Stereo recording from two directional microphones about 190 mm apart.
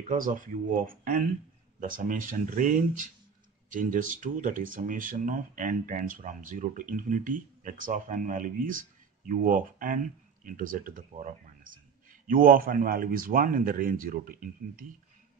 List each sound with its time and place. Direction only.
0.1 s speech: 45° right (ahead or behind)